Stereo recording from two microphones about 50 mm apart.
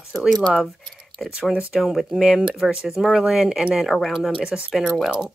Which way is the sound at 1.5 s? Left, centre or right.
Right.